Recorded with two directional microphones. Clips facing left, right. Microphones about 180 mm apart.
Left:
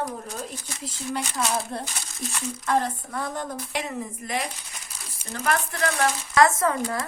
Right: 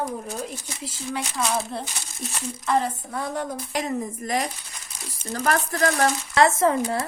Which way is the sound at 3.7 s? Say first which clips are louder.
Right 6 dB; 40° right (ahead or behind).